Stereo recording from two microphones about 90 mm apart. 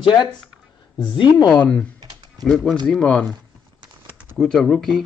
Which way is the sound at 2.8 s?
10° left (ahead or behind).